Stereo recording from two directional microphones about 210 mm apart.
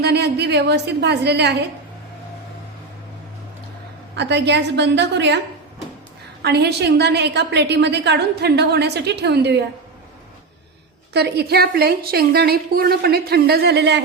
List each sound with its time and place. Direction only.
0.0 s a woman's voice: 50° right (ahead or behind)
4.1 s a woman's voice: 55° right (ahead or behind)
6.4 s a woman's voice: 50° right (ahead or behind)
11.1 s a woman's voice: 50° right (ahead or behind)